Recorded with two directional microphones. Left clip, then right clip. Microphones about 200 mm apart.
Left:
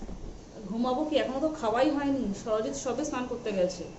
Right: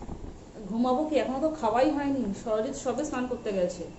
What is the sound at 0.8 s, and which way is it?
A woman's voice, 20° right (ahead or behind).